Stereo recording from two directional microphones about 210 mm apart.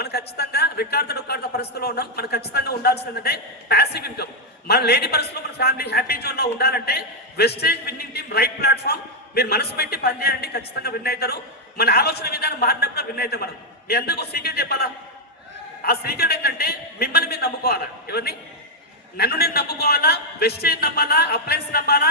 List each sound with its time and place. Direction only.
0.0 s a man's voice: 50° left (ahead or behind)